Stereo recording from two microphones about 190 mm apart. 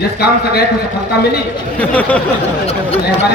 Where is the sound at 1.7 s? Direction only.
5° left (ahead or behind).